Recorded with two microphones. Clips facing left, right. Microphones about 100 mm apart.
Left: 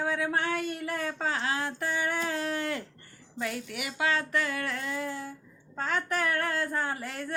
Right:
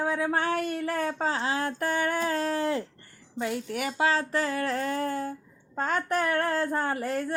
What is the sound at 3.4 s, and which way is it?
Speech, 25° right (ahead or behind).